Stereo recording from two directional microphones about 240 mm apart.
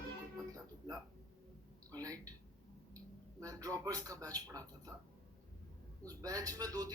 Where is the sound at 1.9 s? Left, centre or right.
Centre.